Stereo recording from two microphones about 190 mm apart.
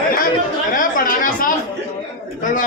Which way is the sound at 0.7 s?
45° left (ahead or behind).